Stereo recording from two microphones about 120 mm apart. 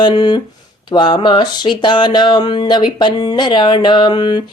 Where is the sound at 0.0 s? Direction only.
40° left (ahead or behind).